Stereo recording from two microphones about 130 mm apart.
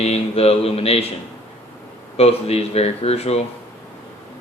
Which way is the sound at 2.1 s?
50° left (ahead or behind).